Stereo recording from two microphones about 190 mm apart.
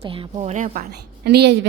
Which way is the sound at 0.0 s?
30° right (ahead or behind).